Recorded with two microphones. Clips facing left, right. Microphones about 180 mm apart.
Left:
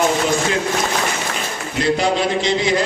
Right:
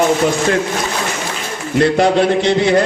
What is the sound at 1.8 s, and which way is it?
A man's voice, 60° right (ahead or behind).